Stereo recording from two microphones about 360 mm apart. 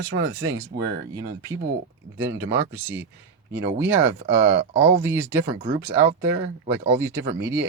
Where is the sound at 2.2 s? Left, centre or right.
Centre.